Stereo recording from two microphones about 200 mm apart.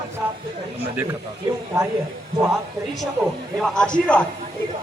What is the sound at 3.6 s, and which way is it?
Speech, 5° left (ahead or behind).